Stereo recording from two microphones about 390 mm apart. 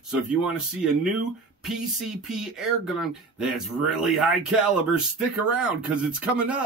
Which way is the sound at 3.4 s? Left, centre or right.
Centre.